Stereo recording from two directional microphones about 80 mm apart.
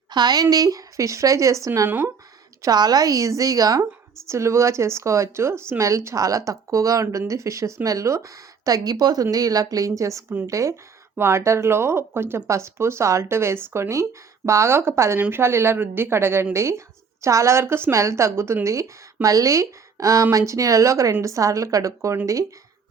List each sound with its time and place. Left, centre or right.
0.1 s speech: right
0.5 s a woman's voice: right
2.6 s a woman's voice: right